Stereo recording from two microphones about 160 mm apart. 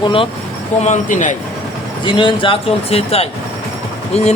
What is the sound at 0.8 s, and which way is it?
Speech, 50° left (ahead or behind).